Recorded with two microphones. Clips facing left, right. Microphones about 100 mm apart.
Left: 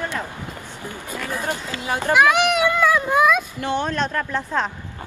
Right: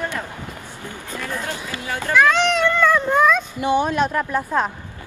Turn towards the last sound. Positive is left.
turn(degrees=-10)  # may be behind; listen again after turning